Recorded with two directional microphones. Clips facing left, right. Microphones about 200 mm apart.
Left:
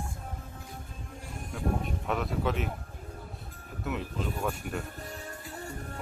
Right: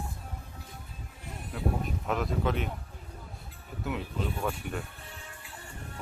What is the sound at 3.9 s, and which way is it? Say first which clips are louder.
Speech: even; centre (ahead or behind).